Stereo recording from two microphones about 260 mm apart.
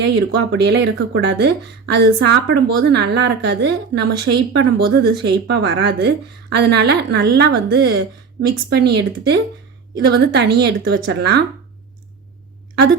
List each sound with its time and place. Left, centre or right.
0.0 s a woman's voice: right